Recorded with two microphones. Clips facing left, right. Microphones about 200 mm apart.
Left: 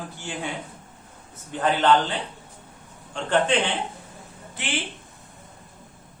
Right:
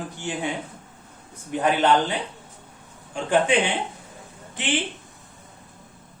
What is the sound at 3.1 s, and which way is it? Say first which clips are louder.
Speech: right 2 dB; 10° right (ahead or behind).